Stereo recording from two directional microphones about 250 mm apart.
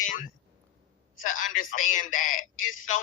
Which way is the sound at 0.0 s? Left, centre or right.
Left.